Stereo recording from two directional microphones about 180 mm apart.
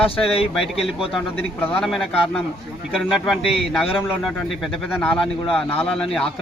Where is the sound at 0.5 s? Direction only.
5° right (ahead or behind).